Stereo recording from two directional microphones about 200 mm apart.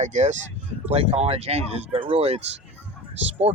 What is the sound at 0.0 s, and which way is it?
A man's voice, 35° right (ahead or behind).